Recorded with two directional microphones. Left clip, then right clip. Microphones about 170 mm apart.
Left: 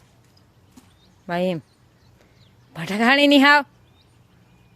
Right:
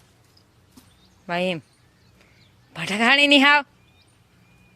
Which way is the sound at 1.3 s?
15° left (ahead or behind).